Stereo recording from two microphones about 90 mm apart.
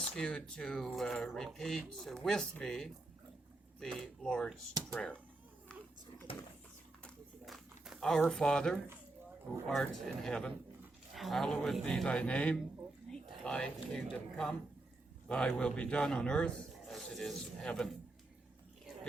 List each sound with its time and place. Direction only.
0.2 s speech: 10° left (ahead or behind)
6.3 s speech: 90° left
7.4 s a sound: centre (ahead or behind)
8.3 s speech: 5° left (ahead or behind)